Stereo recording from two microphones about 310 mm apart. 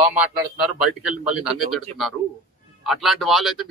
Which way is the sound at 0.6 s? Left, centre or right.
Centre.